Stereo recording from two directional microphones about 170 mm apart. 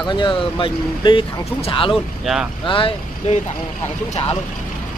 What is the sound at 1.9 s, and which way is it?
Speech, centre (ahead or behind).